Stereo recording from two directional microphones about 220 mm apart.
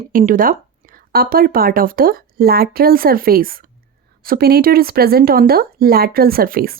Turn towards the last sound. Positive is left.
turn(degrees=-40)  # may be behind; listen again after turning